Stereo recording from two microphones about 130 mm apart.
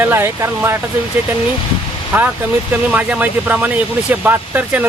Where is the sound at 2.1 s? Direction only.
15° right (ahead or behind).